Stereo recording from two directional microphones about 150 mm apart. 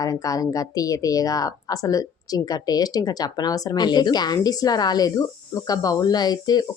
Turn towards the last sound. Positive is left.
turn(degrees=25)  # may be behind; listen again after turning